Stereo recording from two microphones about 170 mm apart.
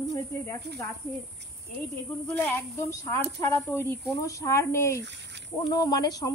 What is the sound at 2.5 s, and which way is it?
Speech, 15° left (ahead or behind).